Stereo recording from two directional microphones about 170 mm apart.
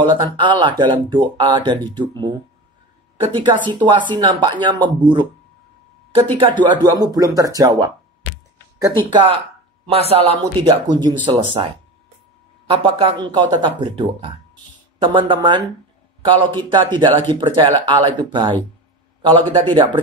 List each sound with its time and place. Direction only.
0.0 s speech: 25° right (ahead or behind)
3.6 s speech: 25° right (ahead or behind)
9.1 s speech: 30° right (ahead or behind)